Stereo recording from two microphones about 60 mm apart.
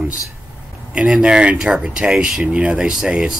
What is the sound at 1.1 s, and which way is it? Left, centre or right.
Speech, centre.